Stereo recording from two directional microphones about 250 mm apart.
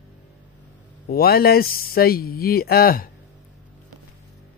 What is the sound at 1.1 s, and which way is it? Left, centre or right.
Speech, left.